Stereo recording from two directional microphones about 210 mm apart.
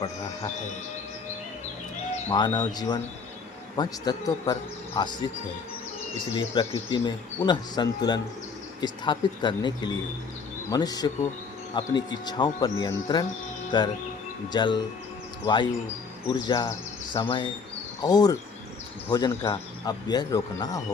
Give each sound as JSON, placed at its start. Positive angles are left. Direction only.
{"t": 2.3, "sound": "speech", "side_deg": 20}
{"t": 16.2, "sound": "speech", "side_deg": 20}